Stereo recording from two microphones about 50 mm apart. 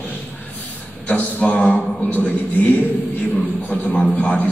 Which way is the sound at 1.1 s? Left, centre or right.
Left.